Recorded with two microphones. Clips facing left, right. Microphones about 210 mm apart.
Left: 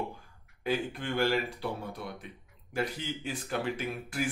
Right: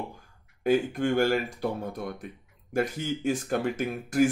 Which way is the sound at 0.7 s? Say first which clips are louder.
Right 8 dB; 45° right (ahead or behind).